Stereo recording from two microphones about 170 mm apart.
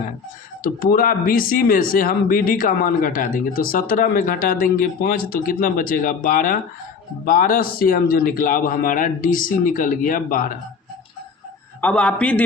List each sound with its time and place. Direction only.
0.6 s speech: 60° left (ahead or behind)
11.8 s a man's voice: 10° left (ahead or behind)